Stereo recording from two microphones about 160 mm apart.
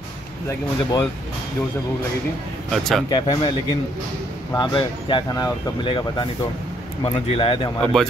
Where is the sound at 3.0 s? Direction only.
25° left (ahead or behind).